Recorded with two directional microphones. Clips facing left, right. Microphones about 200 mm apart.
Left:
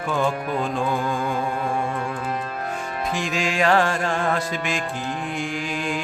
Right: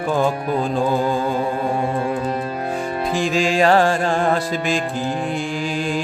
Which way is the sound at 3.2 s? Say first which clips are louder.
Right 7 dB; 30° right (ahead or behind).